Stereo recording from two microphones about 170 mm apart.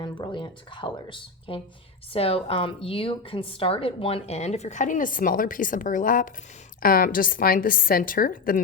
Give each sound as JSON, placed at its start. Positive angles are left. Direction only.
{"t": 0.0, "sound": "a woman's voice", "side_deg": 30}